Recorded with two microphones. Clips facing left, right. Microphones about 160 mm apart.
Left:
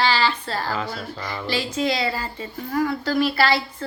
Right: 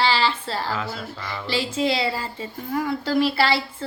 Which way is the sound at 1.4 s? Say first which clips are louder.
Right 1 dB; 25° right (ahead or behind).